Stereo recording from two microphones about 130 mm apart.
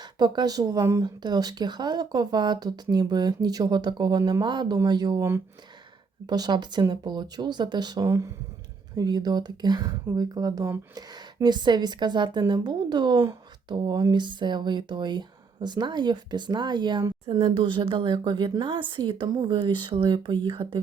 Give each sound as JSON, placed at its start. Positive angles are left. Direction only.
{"t": 0.0, "sound": "a woman's voice", "side_deg": -30}
{"t": 6.2, "sound": "a woman's voice", "side_deg": -30}